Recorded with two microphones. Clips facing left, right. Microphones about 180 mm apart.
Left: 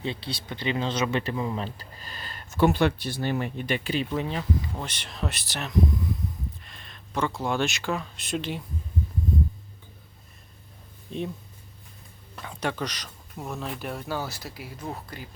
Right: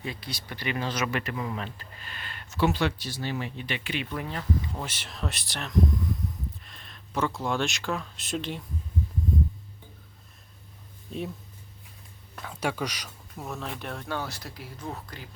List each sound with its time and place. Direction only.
0.0 s speech: 25° left (ahead or behind)
4.1 s speech: 20° left (ahead or behind)
4.7 s speech: 5° right (ahead or behind)
11.1 s speech: 5° right (ahead or behind)
12.4 s speech: 5° right (ahead or behind)
13.4 s speech: centre (ahead or behind)